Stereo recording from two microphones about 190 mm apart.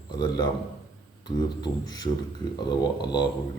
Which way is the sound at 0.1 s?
20° left (ahead or behind).